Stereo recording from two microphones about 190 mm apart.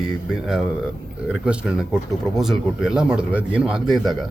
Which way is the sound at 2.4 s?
Centre (ahead or behind).